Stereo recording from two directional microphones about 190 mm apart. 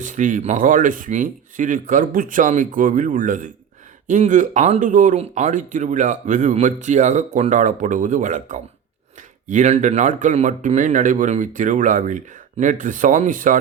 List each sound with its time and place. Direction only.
0.0 s speech: 40° right (ahead or behind)